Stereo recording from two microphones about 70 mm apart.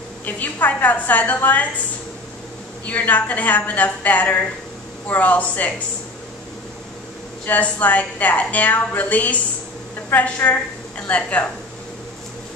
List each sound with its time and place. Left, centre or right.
0.2 s a woman's voice: left
2.8 s a woman's voice: left
7.4 s a woman's voice: left